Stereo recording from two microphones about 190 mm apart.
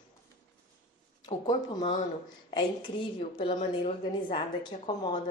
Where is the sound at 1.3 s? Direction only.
25° left (ahead or behind).